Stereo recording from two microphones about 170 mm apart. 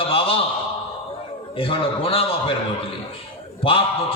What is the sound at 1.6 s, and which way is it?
Speech, 35° left (ahead or behind).